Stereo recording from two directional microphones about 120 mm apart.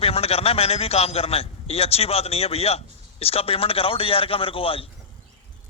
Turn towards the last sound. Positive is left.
turn(degrees=50)  # may be behind; listen again after turning